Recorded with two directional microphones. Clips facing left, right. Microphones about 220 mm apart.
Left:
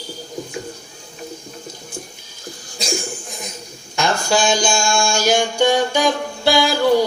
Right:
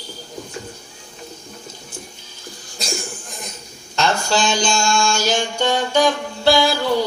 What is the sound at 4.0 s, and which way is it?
Music, 10° left (ahead or behind).